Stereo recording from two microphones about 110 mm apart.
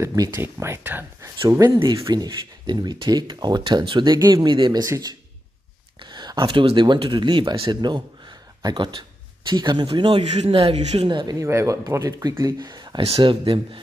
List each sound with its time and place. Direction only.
0.0 s speech: 30° right (ahead or behind)
2.0 s speech: 35° right (ahead or behind)
4.8 s speech: 30° right (ahead or behind)
5.9 s speech: 40° right (ahead or behind)
10.5 s speech: 60° right (ahead or behind)
11.1 s speech: 45° right (ahead or behind)
11.3 s speech: 25° right (ahead or behind)
13.0 s speech: 55° right (ahead or behind)